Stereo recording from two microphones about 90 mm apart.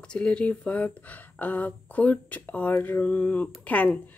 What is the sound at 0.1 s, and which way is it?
Speech, 10° left (ahead or behind).